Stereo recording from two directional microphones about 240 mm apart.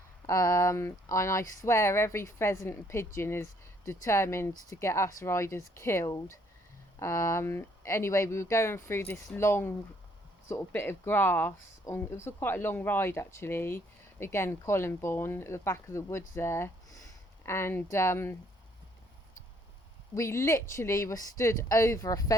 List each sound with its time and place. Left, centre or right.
0.3 s speech: centre
20.1 s speech: centre